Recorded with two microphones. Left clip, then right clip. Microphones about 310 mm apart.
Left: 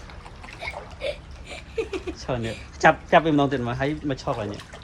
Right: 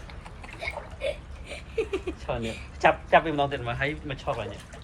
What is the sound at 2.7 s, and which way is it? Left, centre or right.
A man's voice, left.